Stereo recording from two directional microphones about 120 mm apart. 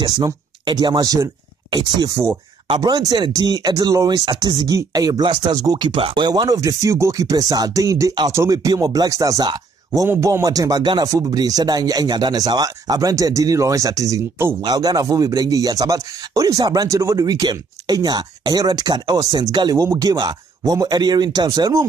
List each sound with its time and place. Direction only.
0.0 s speech: 35° right (ahead or behind)
10.0 s speech: 20° right (ahead or behind)